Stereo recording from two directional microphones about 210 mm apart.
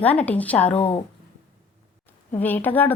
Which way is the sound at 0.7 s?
25° left (ahead or behind).